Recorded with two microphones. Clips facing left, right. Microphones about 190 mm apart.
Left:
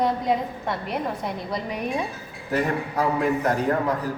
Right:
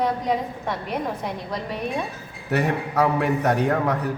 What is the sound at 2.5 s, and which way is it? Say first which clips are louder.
A man's voice: right 1 dB; 75° right (ahead or behind).